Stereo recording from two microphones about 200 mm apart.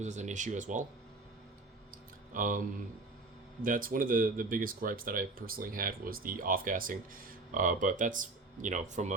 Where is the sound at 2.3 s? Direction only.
40° right (ahead or behind).